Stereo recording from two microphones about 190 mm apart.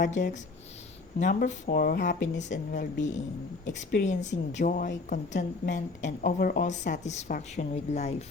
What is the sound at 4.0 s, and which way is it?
A woman's voice, 40° left (ahead or behind).